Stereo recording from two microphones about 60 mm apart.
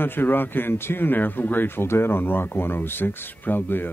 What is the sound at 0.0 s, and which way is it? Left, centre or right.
Speech, left.